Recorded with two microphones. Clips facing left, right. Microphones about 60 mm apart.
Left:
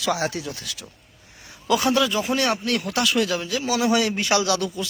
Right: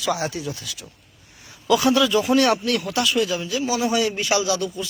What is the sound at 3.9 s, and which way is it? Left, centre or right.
Speech, left.